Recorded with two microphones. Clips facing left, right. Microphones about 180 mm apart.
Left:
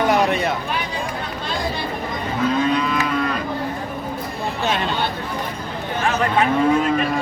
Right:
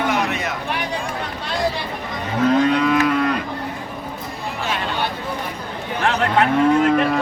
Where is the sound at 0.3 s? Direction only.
35° left (ahead or behind).